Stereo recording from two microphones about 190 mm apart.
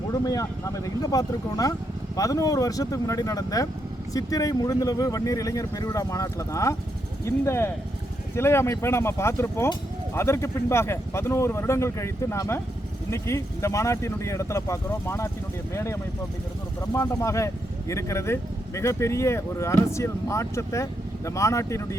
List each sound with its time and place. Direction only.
0.1 s speech: 20° left (ahead or behind)